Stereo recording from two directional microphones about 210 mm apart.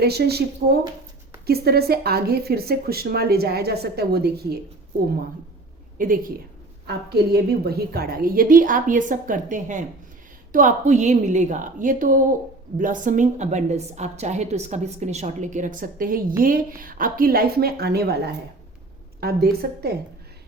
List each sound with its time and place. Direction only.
0.0 s a woman's voice: 50° right (ahead or behind)
6.0 s a woman's voice: 40° right (ahead or behind)
19.2 s a woman's voice: 50° right (ahead or behind)